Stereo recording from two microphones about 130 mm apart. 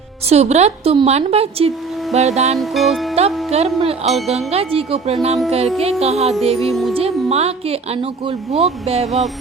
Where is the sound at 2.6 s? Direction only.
Centre (ahead or behind).